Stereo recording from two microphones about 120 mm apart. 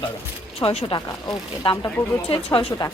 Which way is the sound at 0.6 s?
55° left (ahead or behind).